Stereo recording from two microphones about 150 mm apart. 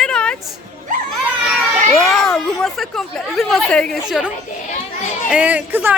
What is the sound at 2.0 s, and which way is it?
A woman's voice, centre (ahead or behind).